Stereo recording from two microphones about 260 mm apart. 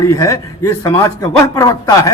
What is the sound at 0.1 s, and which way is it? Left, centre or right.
A man's voice, centre.